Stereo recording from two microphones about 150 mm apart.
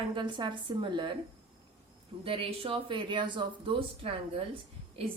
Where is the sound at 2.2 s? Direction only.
35° right (ahead or behind).